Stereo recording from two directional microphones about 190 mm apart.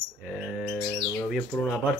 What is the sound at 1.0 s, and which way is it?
Bird, 10° left (ahead or behind).